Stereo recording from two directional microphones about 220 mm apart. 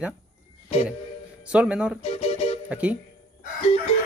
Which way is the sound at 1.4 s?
5° right (ahead or behind).